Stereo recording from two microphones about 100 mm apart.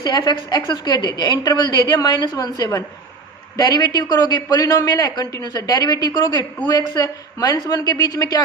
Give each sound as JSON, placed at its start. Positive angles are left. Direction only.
{"t": 0.0, "sound": "a woman's voice", "side_deg": 45}